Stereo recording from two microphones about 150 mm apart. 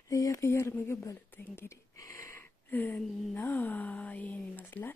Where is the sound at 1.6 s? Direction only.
20° left (ahead or behind).